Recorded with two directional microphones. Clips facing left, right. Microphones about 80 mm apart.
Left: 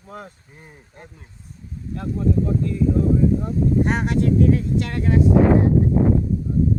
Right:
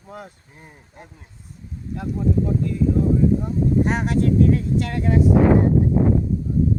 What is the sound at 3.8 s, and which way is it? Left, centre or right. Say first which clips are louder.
Speech: even; centre.